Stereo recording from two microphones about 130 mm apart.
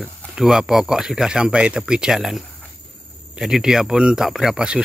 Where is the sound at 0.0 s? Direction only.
Centre (ahead or behind).